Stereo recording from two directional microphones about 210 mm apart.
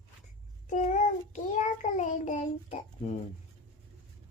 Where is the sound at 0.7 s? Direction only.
35° left (ahead or behind).